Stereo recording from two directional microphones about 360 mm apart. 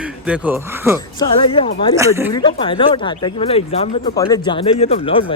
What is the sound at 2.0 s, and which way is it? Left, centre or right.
Speech, centre.